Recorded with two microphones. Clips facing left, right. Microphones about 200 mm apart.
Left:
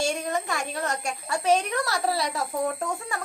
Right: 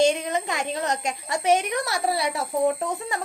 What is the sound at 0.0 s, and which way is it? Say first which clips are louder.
A woman's voice: right 6 dB; 20° right (ahead or behind).